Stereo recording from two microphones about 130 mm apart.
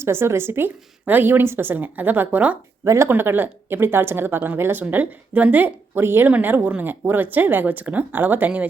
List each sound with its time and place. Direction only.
0.0 s speech: 20° right (ahead or behind)
2.8 s speech: 20° right (ahead or behind)